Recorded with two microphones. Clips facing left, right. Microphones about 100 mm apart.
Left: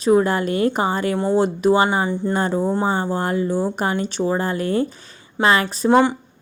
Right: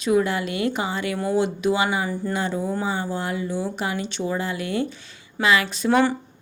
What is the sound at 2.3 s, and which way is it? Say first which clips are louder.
Speech: left 6 dB; 40° left (ahead or behind).